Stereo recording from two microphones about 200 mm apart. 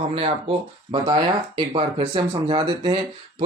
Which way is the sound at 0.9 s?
25° right (ahead or behind).